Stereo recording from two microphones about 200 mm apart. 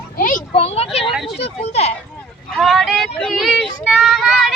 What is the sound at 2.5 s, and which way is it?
Speech, centre (ahead or behind).